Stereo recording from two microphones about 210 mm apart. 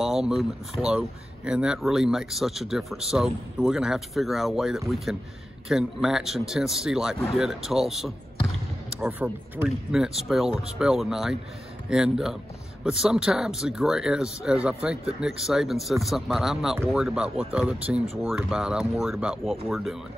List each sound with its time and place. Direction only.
0.0 s speech: centre (ahead or behind)